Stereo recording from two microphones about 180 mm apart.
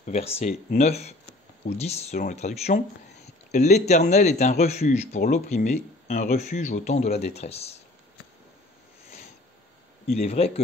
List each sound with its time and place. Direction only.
0.0 s speech: 35° left (ahead or behind)
10.1 s speech: 35° left (ahead or behind)